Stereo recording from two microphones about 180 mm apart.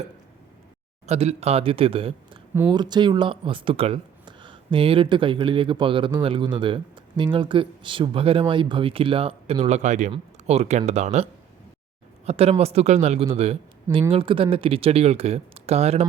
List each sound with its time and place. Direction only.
1.0 s speech: 35° right (ahead or behind)